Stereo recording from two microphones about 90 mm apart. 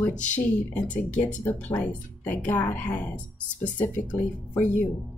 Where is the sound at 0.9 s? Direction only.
15° left (ahead or behind).